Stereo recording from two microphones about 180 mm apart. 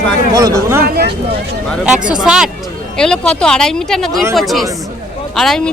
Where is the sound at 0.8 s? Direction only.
60° right (ahead or behind).